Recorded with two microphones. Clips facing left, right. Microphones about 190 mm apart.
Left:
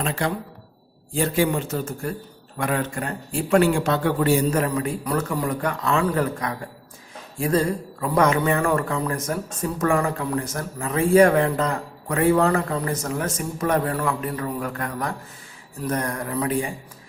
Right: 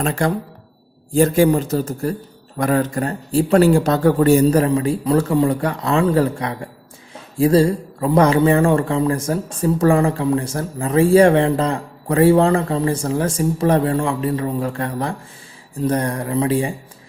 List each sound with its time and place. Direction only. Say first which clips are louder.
0.0 s a man's voice: right 6 dB; 45° right (ahead or behind)
4.6 s a man's voice: right 7 dB; 30° right (ahead or behind)